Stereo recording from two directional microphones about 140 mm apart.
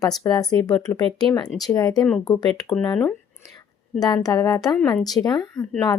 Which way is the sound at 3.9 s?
30° left (ahead or behind).